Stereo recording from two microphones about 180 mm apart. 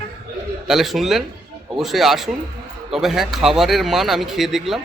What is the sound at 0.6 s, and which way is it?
A man's voice, centre (ahead or behind).